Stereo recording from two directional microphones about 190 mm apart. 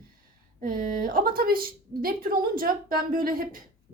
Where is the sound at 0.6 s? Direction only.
45° right (ahead or behind).